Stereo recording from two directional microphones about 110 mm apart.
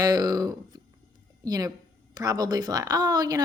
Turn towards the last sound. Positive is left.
turn(degrees=-35)  # may be behind; listen again after turning